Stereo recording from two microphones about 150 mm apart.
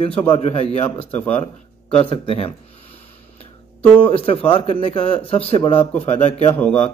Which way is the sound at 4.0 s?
40° left (ahead or behind).